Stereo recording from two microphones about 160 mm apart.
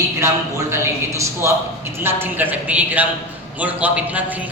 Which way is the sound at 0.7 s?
15° right (ahead or behind).